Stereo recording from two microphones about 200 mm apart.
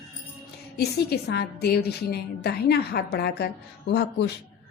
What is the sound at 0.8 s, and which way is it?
A woman's voice, 55° left (ahead or behind).